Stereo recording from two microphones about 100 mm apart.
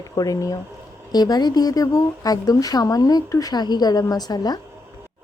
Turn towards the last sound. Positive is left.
turn(degrees=40)  # may be behind; listen again after turning